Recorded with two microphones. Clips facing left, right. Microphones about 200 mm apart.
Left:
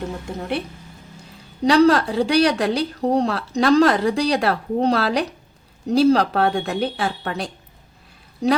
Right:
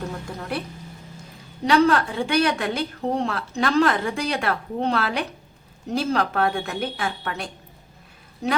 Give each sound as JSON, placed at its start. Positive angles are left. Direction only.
{"t": 0.3, "sound": "speech", "side_deg": 25}
{"t": 1.6, "sound": "speech", "side_deg": 35}